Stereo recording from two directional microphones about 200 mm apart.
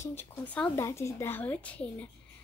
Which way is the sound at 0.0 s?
10° left (ahead or behind).